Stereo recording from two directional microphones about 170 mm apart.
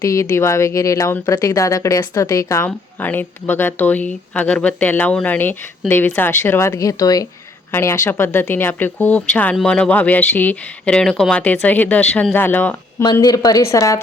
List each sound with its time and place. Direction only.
0.0 s a woman's voice: 20° left (ahead or behind)